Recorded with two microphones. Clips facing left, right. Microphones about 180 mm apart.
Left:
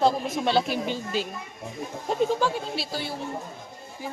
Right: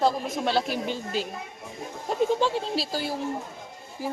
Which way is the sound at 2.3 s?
25° right (ahead or behind).